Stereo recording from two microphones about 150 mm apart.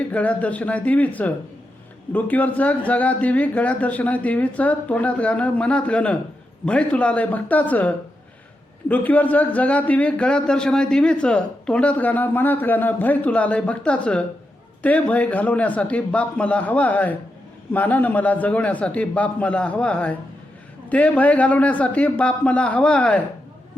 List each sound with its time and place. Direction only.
0.1 s a man's voice: 10° left (ahead or behind)